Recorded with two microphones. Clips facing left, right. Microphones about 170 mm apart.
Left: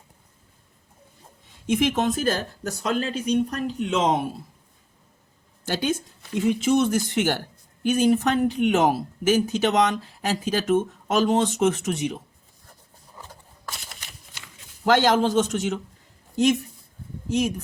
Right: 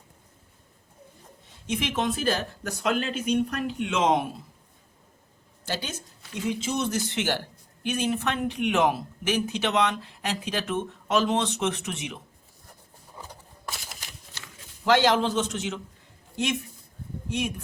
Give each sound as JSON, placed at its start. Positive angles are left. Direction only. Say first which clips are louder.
{"t": 1.6, "sound": "speech", "louder": "left 6 dB", "side_deg": 50}
{"t": 5.6, "sound": "speech", "louder": "left 8 dB", "side_deg": 55}
{"t": 13.7, "sound": "a sound", "louder": "even", "side_deg": 0}
{"t": 14.8, "sound": "a woman's voice", "louder": "left 2 dB", "side_deg": 45}